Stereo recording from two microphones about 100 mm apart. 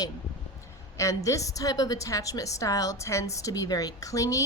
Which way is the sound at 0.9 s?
35° left (ahead or behind).